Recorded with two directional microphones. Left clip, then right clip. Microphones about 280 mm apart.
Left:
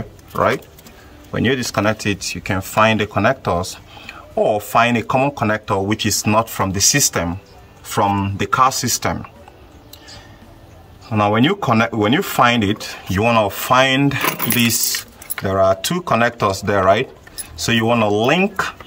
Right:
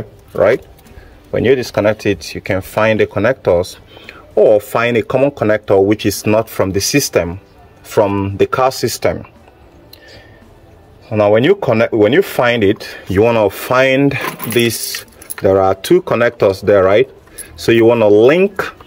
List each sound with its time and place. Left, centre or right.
1.4 s speech: centre
11.1 s speech: centre